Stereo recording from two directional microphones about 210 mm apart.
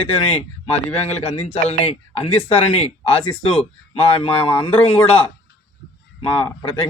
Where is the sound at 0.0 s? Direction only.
25° left (ahead or behind).